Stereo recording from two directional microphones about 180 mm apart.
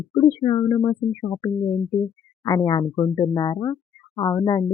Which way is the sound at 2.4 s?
20° left (ahead or behind).